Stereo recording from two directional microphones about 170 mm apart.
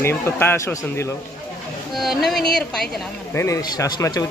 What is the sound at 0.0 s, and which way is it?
A man's voice, 15° left (ahead or behind).